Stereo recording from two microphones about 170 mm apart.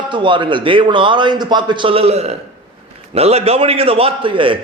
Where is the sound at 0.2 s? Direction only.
30° right (ahead or behind).